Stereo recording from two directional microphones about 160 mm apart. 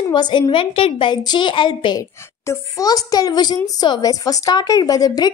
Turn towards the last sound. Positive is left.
turn(degrees=25)  # may be behind; listen again after turning